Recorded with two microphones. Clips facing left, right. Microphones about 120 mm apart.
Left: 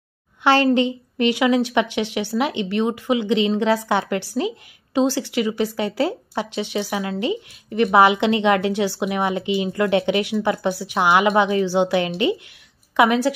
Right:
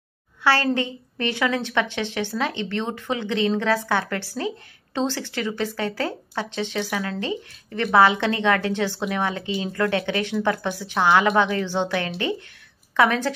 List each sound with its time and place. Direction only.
0.4 s a woman's voice: 20° left (ahead or behind)